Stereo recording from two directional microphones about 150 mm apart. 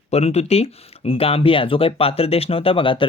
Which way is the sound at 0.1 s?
45° left (ahead or behind).